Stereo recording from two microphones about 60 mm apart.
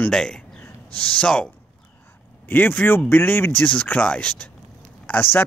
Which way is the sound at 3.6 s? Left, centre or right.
Left.